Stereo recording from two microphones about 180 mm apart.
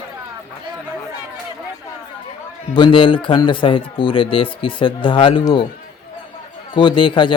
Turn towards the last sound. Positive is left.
turn(degrees=25)  # may be behind; listen again after turning